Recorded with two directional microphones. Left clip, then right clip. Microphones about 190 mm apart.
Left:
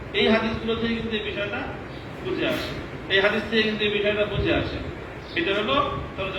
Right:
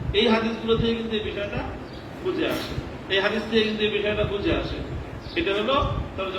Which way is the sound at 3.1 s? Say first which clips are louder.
Left 2 dB; 20° right (ahead or behind).